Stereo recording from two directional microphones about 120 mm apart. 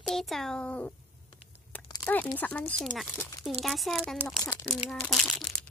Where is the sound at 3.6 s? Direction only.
Centre (ahead or behind).